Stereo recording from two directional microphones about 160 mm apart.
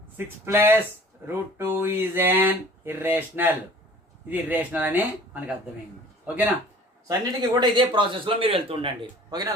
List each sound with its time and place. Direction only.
0.2 s speech: 15° right (ahead or behind)
7.1 s a man's voice: 25° right (ahead or behind)